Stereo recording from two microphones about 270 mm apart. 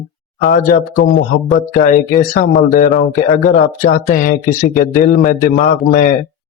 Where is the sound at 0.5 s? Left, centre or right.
Left.